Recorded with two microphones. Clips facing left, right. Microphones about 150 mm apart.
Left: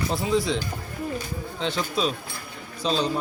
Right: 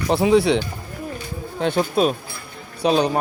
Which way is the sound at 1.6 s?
55° right (ahead or behind).